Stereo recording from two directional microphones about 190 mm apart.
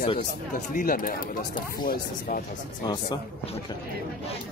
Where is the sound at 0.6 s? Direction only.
45° left (ahead or behind).